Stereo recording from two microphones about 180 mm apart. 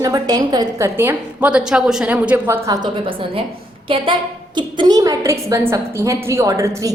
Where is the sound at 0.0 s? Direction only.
20° right (ahead or behind).